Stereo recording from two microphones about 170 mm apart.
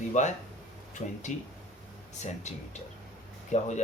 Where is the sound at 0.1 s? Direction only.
45° left (ahead or behind).